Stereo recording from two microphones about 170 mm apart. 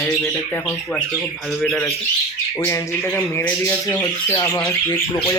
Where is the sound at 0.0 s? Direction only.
15° left (ahead or behind).